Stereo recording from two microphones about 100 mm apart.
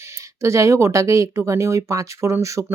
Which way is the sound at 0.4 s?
30° right (ahead or behind).